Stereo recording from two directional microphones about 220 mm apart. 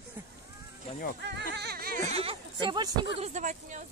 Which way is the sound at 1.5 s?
45° right (ahead or behind).